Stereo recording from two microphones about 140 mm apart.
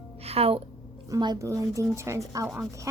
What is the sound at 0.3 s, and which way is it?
Speech, 45° right (ahead or behind).